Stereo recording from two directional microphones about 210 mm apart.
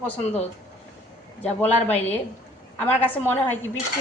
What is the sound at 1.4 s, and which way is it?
Speech, 10° left (ahead or behind).